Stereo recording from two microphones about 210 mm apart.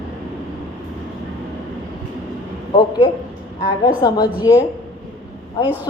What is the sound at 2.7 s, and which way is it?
A woman's voice, 20° left (ahead or behind).